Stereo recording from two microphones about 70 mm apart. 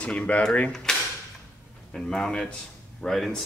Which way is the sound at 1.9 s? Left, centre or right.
Centre.